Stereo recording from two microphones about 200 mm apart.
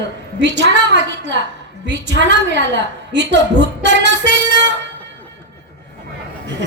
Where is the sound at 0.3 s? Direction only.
60° right (ahead or behind).